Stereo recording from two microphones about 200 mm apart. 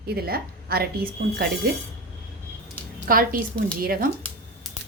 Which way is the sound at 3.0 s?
45° right (ahead or behind).